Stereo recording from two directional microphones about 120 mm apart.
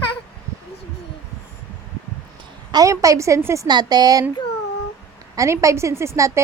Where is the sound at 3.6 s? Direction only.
35° right (ahead or behind).